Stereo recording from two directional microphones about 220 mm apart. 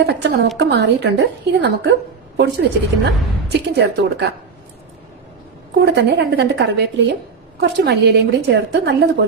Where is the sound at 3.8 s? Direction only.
55° right (ahead or behind).